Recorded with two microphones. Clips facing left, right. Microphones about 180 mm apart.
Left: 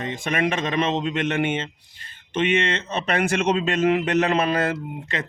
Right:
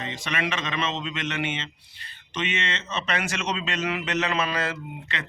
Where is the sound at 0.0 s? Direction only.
50° left (ahead or behind).